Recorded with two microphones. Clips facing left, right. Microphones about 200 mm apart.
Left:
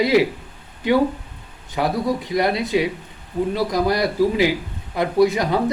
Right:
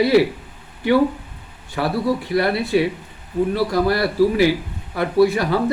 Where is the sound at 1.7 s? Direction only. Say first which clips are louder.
Right 1 dB; 20° left (ahead or behind).